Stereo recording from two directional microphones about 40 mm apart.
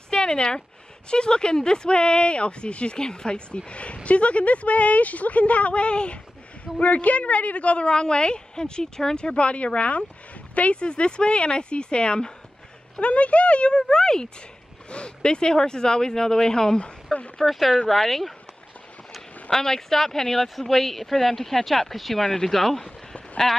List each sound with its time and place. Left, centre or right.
0.1 s a sound: left
1.1 s a woman's voice: left
17.4 s speech: centre
19.5 s speech: centre
22.8 s a sound: left
23.4 s speech: centre